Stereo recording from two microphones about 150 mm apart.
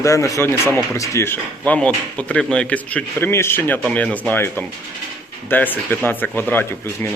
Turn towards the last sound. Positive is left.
turn(degrees=15)  # may be behind; listen again after turning